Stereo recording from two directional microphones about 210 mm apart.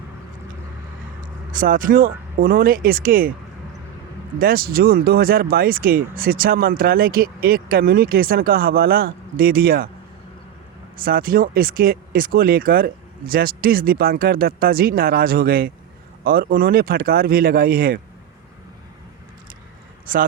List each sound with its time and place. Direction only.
1.2 s speech: 40° right (ahead or behind)
4.4 s speech: 45° right (ahead or behind)
10.9 s speech: 45° right (ahead or behind)
20.1 s speech: 40° right (ahead or behind)